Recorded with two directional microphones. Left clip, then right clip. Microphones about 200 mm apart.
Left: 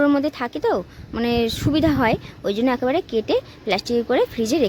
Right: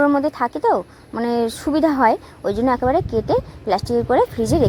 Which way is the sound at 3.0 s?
Centre (ahead or behind).